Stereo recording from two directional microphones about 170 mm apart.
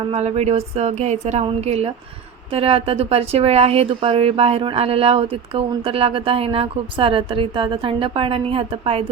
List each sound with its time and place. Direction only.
0.0 s speech: 35° right (ahead or behind)